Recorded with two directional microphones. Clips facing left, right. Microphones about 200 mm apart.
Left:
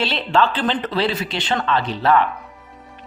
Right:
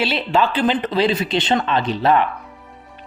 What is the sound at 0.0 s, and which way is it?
Speech, 10° right (ahead or behind).